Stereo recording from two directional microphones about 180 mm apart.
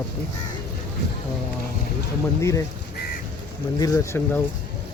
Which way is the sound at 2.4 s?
15° left (ahead or behind).